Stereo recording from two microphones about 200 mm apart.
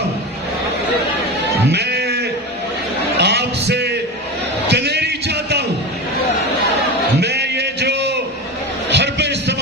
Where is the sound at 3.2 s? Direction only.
55° right (ahead or behind).